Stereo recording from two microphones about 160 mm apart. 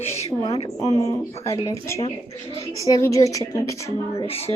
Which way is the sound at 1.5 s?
20° left (ahead or behind).